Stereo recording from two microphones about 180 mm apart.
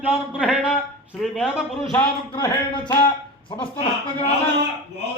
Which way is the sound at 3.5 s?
30° left (ahead or behind).